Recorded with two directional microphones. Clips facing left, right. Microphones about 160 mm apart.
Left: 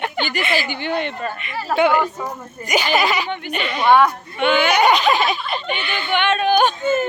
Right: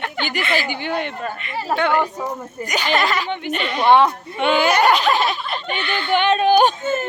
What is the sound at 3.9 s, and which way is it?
Speech, 25° right (ahead or behind).